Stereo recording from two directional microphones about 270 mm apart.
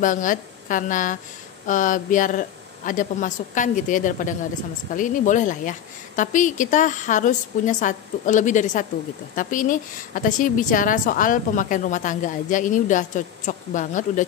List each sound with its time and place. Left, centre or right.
0.0 s a woman's voice: left